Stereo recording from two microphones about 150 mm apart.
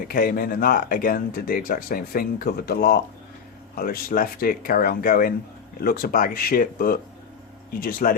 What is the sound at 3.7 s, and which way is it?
Speech, 80° left.